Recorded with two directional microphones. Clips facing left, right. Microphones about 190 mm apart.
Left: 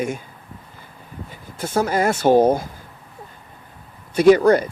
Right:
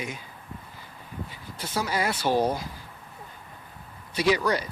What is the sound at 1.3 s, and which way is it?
Speech, 50° left (ahead or behind).